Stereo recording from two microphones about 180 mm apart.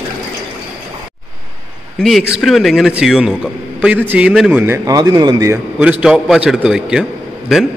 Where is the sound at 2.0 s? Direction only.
Centre (ahead or behind).